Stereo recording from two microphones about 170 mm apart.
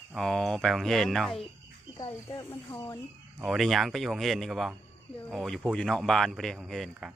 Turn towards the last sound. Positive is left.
turn(degrees=0)  # may be behind; listen again after turning